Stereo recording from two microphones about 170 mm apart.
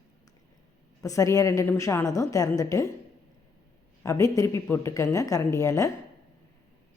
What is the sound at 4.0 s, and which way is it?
Speech, 20° left (ahead or behind).